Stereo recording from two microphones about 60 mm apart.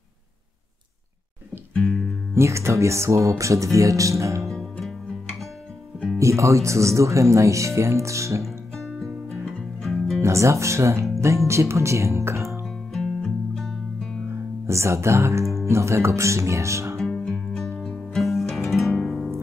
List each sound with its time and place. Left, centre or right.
1.8 s music: centre
2.3 s speech: right
4.5 s music: centre
6.1 s speech: right
8.7 s music: centre
10.2 s speech: right
12.6 s music: centre
14.7 s speech: right
17.0 s music: centre